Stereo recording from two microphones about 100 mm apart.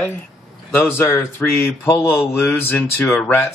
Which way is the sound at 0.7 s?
20° left (ahead or behind).